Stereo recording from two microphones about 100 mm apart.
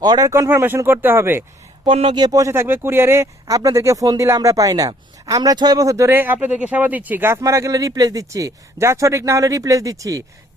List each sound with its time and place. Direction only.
0.0 s speech: 40° right (ahead or behind)
0.3 s speech: 30° right (ahead or behind)
1.8 s speech: 65° right (ahead or behind)
2.1 s speech: 40° right (ahead or behind)
2.5 s speech: 25° right (ahead or behind)
6.1 s speech: 20° right (ahead or behind); by 10.2 s 35° right (ahead or behind)